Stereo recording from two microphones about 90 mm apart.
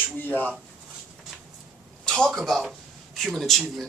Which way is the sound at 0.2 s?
20° left (ahead or behind).